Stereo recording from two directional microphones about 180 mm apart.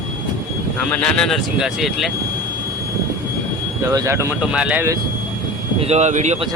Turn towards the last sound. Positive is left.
turn(degrees=-40)  # may be behind; listen again after turning